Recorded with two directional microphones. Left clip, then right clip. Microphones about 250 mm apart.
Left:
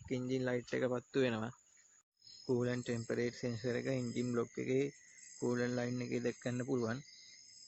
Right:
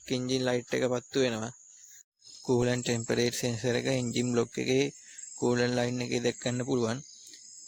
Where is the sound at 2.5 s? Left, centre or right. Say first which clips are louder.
Right 9 dB; right.